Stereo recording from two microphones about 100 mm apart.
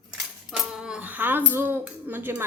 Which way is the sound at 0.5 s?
5° right (ahead or behind).